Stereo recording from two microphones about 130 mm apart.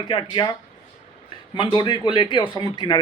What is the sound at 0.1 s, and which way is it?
Speech, 35° left (ahead or behind).